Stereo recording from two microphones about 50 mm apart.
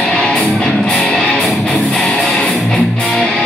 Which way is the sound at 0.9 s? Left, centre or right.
Centre.